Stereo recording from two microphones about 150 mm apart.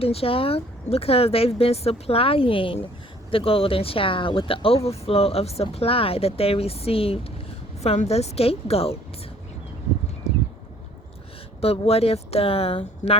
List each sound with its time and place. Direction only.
0.0 s a woman's voice: 40° left (ahead or behind)
11.6 s speech: 40° left (ahead or behind)